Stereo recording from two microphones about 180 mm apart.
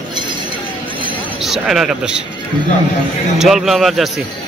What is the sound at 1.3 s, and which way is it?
Speech, centre (ahead or behind).